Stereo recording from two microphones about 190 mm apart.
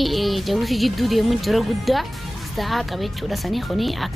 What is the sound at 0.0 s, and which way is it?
Speech, centre (ahead or behind).